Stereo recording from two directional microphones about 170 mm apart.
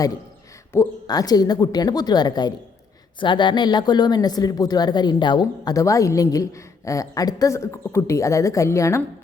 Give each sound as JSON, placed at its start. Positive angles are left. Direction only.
{"t": 0.7, "sound": "speech", "side_deg": 20}